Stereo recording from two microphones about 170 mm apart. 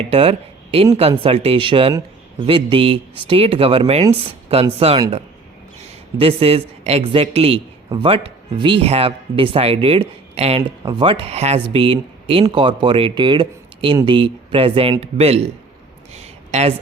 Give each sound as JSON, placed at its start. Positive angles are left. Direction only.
{"t": 0.0, "sound": "a man's voice", "side_deg": -35}
{"t": 6.1, "sound": "a man's voice", "side_deg": -35}
{"t": 16.1, "sound": "a sound", "side_deg": -40}